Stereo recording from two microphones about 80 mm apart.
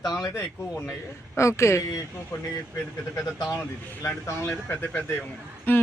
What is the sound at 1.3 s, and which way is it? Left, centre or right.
Speech, left.